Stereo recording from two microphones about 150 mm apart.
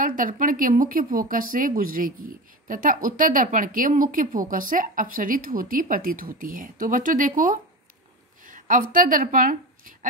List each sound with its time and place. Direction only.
0.0 s speech: 65° right (ahead or behind)
8.5 s a sound: 60° right (ahead or behind)
8.9 s a woman's voice: 65° right (ahead or behind)